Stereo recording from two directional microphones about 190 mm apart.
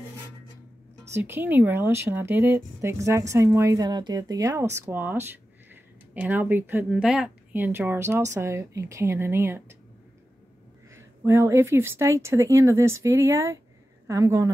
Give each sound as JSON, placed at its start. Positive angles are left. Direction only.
{"t": 1.1, "sound": "a woman's voice", "side_deg": -10}
{"t": 11.0, "sound": "a woman's voice", "side_deg": -15}